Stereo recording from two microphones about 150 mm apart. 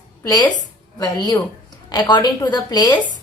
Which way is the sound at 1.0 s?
25° left (ahead or behind).